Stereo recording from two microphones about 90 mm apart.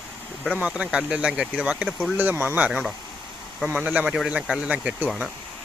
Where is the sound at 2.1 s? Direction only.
20° right (ahead or behind).